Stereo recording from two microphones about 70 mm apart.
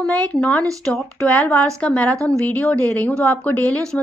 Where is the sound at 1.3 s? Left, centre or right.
Left.